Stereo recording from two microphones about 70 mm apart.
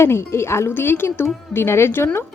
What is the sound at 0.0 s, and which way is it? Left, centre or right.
A woman's voice, left.